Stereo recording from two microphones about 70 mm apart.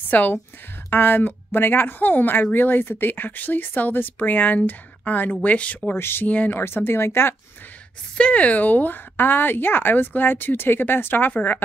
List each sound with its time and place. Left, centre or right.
0.1 s a woman's voice: left
5.9 s speech: left
6.2 s speech: left
6.6 s speech: left
8.2 s speech: centre